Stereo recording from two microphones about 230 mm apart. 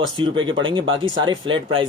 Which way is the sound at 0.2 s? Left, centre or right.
Right.